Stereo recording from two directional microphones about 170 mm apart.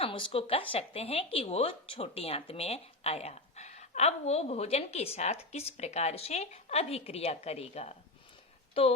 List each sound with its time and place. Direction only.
0.0 s a woman's voice: 30° left (ahead or behind)